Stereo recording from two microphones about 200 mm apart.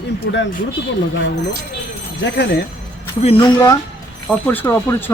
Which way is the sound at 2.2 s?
60° left (ahead or behind).